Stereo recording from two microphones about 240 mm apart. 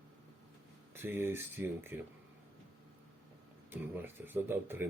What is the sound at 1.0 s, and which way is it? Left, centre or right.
A man's voice, centre.